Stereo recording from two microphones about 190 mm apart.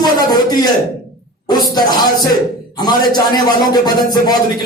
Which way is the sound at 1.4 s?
20° left (ahead or behind).